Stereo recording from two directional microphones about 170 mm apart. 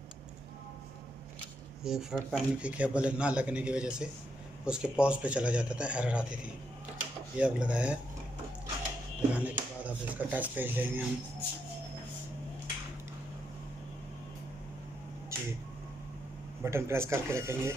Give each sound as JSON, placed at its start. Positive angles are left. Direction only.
{"t": 1.8, "sound": "speech", "side_deg": -5}
{"t": 7.3, "sound": "speech", "side_deg": -5}
{"t": 9.3, "sound": "speech", "side_deg": -10}
{"t": 15.3, "sound": "a sound", "side_deg": -15}
{"t": 16.6, "sound": "speech", "side_deg": -15}